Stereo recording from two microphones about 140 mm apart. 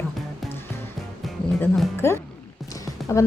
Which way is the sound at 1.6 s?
15° left (ahead or behind).